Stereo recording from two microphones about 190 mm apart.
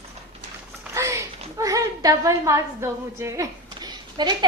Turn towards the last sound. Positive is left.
turn(degrees=-20)  # may be behind; listen again after turning